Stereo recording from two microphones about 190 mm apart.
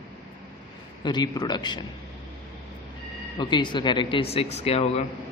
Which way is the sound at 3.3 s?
25° left (ahead or behind).